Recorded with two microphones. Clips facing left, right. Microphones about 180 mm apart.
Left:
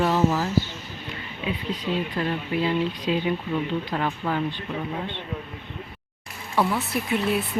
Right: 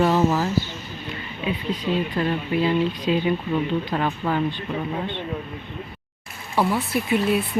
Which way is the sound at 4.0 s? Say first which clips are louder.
Right 3 dB; 35° right (ahead or behind).